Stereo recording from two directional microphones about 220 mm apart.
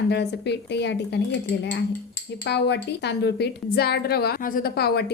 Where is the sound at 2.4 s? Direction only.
50° left (ahead or behind).